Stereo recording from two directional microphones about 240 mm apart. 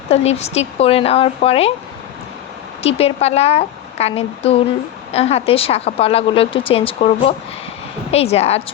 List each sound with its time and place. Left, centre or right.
0.1 s speech: left
2.8 s speech: left